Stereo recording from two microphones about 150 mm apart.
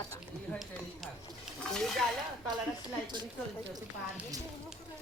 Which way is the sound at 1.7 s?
5° left (ahead or behind).